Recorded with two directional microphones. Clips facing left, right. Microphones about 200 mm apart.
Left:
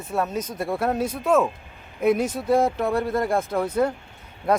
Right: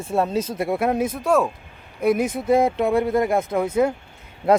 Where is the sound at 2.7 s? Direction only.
20° right (ahead or behind).